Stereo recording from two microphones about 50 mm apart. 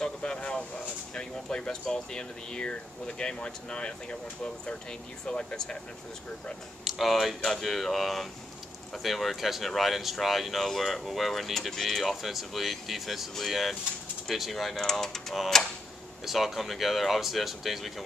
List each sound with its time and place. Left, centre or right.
0.0 s a sound: centre
1.1 s speech: centre
5.2 s speech: centre
6.8 s speech: centre